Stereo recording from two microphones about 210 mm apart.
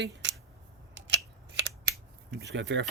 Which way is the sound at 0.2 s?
60° right (ahead or behind).